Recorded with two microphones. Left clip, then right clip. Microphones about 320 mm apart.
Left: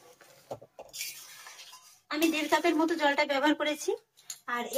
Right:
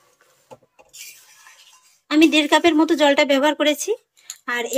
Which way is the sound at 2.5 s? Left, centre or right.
Right.